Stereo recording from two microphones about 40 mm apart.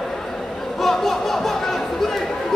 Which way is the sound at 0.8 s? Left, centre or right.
Centre.